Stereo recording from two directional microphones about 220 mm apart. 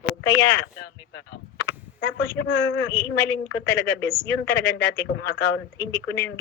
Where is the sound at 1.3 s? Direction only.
45° left (ahead or behind).